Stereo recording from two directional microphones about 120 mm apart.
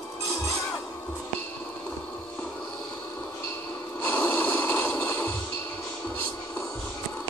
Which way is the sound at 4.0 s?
20° left (ahead or behind).